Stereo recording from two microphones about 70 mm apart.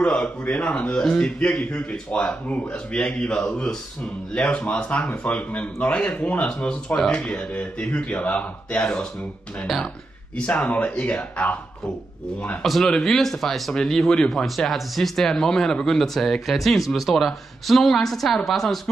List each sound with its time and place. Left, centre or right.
0.0 s speech: centre
10.3 s speech: centre
12.6 s speech: centre